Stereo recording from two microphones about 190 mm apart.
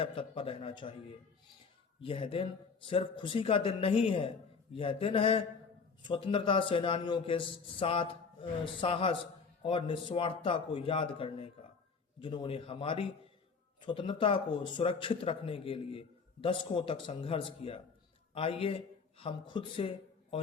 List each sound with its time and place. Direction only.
0.0 s speech: 30° left (ahead or behind)
2.0 s speech: 30° left (ahead or behind)